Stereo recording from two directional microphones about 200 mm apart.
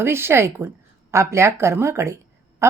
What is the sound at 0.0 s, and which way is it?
Speech, 10° right (ahead or behind).